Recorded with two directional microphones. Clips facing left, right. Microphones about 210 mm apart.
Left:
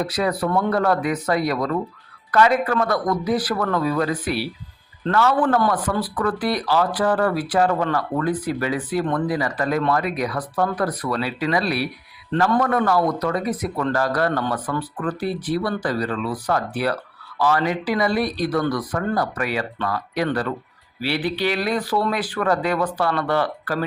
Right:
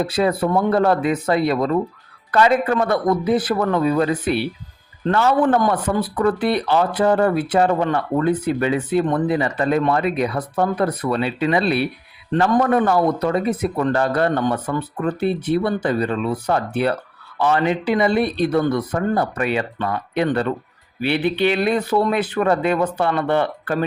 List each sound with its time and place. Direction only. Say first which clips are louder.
0.0 s a man's voice: right 3 dB; 25° right (ahead or behind)